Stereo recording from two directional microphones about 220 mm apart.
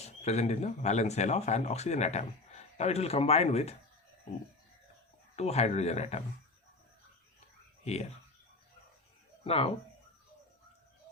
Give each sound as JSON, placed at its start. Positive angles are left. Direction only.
{"t": 0.0, "sound": "speech", "side_deg": 30}
{"t": 5.4, "sound": "speech", "side_deg": 30}
{"t": 9.4, "sound": "speech", "side_deg": 25}